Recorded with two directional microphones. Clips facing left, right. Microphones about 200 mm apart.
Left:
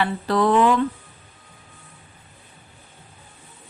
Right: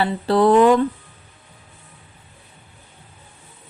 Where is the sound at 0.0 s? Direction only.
30° right (ahead or behind).